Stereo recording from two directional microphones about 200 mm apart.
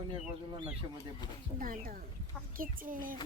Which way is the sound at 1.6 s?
45° right (ahead or behind).